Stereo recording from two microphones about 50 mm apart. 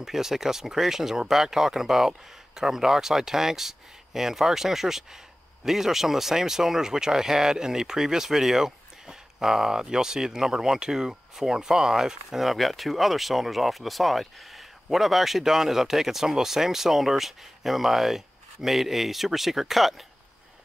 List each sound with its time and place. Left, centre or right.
0.0 s speech: centre